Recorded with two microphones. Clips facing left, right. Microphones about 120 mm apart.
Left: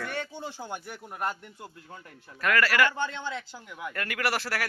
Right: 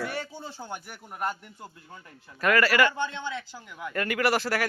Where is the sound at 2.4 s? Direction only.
Centre (ahead or behind).